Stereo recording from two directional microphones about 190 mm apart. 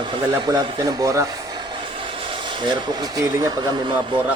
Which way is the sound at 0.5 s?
15° right (ahead or behind).